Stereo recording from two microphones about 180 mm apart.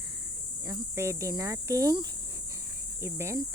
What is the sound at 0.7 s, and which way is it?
Speech, 15° right (ahead or behind).